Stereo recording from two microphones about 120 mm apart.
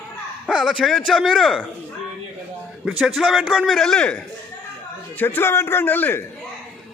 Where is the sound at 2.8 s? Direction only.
5° right (ahead or behind).